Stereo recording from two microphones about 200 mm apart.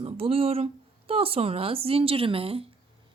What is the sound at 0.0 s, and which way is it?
A woman's voice, 30° right (ahead or behind).